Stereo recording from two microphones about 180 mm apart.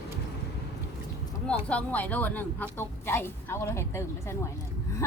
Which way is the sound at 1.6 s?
10° left (ahead or behind).